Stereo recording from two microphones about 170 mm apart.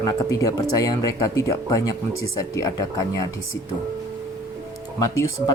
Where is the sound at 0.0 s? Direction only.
20° left (ahead or behind).